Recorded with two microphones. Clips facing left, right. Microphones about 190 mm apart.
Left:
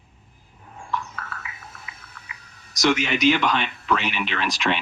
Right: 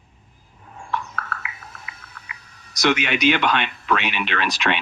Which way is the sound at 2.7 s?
65° right (ahead or behind).